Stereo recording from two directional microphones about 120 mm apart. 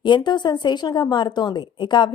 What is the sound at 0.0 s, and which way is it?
A woman's voice, 40° left (ahead or behind).